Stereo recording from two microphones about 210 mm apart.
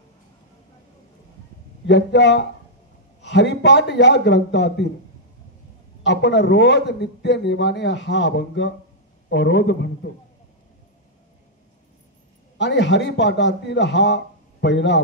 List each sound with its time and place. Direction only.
1.9 s a man's voice: 55° left (ahead or behind)
6.0 s a man's voice: 55° left (ahead or behind)
12.5 s a man's voice: 55° left (ahead or behind)